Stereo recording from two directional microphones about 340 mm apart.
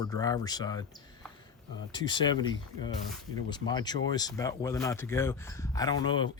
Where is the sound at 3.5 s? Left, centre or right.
Centre.